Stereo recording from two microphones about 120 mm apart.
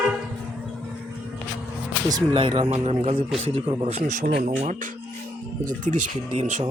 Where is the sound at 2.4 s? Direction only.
45° right (ahead or behind).